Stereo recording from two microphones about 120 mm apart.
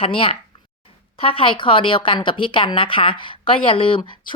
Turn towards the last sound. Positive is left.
turn(degrees=50)  # may be behind; listen again after turning